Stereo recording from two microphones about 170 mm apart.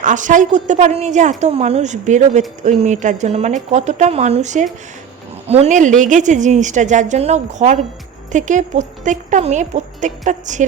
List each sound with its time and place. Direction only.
0.0 s a woman's voice: 50° right (ahead or behind)